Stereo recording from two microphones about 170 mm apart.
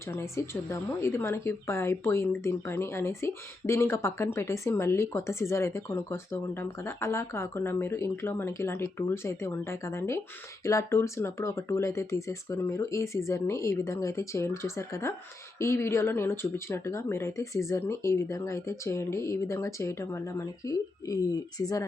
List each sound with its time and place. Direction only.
0.1 s speech: 15° left (ahead or behind)